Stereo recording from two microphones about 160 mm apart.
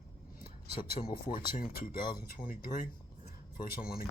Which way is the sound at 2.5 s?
60° left (ahead or behind).